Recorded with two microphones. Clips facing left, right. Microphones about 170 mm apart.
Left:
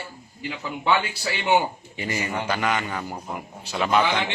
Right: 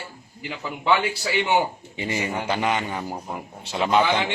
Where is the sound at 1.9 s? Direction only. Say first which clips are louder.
Right 2 dB; 25° right (ahead or behind).